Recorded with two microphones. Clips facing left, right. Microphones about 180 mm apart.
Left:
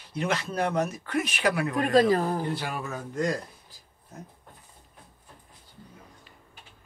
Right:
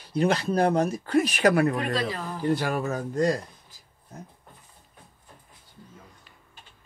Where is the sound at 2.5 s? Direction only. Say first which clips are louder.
Right 7 dB; 45° right (ahead or behind).